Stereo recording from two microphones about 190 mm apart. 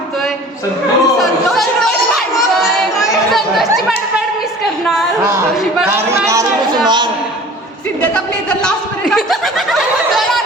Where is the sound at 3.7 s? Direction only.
Centre (ahead or behind).